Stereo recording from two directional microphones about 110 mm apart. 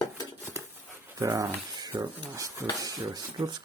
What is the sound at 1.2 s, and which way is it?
Speech, 30° right (ahead or behind).